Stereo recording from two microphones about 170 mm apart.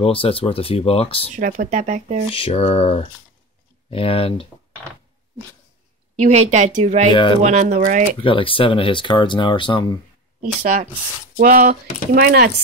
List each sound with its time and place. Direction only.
0.0 s speech: 35° left (ahead or behind)
1.3 s speech: 45° right (ahead or behind)
2.3 s speech: 35° left (ahead or behind)
6.2 s speech: 40° right (ahead or behind)
7.1 s speech: 30° left (ahead or behind)
7.4 s speech: 45° right (ahead or behind)
8.2 s speech: 30° left (ahead or behind)
10.4 s speech: 50° right (ahead or behind); by 12.4 s 65° right (ahead or behind)